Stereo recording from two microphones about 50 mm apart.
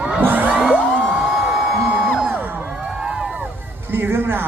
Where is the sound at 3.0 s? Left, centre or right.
Centre.